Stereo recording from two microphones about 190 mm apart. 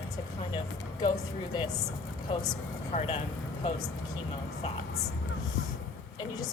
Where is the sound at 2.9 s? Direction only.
30° left (ahead or behind).